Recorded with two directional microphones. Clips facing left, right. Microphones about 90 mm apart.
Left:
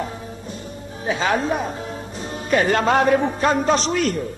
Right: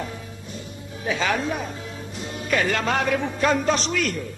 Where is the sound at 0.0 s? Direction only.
35° left (ahead or behind).